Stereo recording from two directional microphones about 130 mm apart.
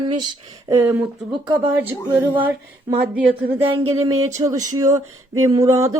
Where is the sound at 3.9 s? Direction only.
25° right (ahead or behind).